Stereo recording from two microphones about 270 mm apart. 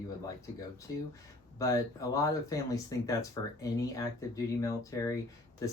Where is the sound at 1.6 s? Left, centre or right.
Centre.